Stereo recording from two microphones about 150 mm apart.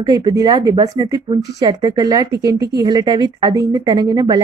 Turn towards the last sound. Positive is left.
turn(degrees=-25)  # may be behind; listen again after turning